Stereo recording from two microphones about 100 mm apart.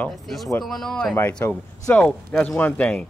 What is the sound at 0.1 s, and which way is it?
A woman's voice, centre (ahead or behind).